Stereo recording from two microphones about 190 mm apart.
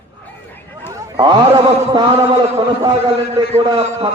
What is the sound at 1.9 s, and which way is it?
A man's voice, 25° right (ahead or behind).